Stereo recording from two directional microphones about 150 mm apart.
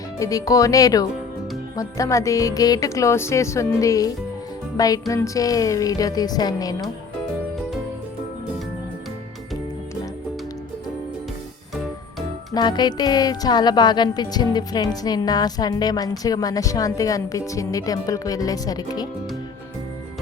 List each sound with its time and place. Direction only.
0.2 s a woman's voice: 20° left (ahead or behind)
12.5 s a woman's voice: 30° left (ahead or behind)